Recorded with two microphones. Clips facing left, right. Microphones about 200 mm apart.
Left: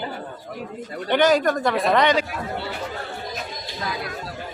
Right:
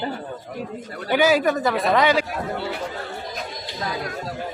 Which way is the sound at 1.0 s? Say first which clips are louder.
Even; 5° right (ahead or behind).